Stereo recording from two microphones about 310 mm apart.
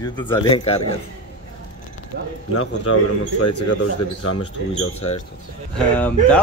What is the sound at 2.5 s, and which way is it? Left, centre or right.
Speech, left.